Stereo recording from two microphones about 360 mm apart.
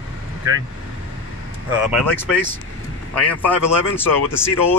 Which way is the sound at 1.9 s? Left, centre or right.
Centre.